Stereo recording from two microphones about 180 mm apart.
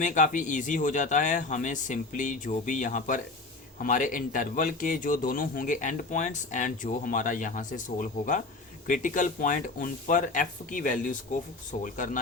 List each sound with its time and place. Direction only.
0.0 s a man's voice: 45° left (ahead or behind)